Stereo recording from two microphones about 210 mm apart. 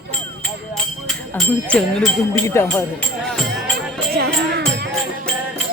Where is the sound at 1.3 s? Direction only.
Centre (ahead or behind).